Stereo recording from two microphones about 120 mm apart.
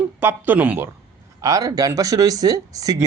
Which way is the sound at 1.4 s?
30° right (ahead or behind).